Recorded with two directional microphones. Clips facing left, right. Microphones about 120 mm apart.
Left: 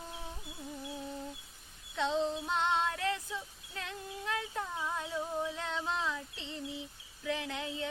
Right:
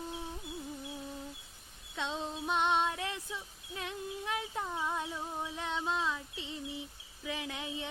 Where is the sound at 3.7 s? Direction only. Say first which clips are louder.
Right 3 dB; 15° right (ahead or behind).